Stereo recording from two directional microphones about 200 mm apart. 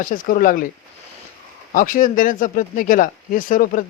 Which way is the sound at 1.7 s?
45° left (ahead or behind).